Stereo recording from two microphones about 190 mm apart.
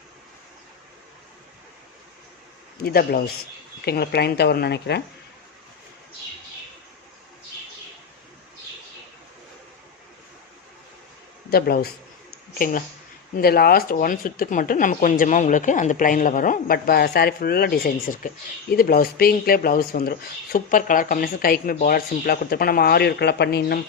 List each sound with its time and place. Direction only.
2.8 s speech: 55° left (ahead or behind)
11.5 s speech: 55° left (ahead or behind)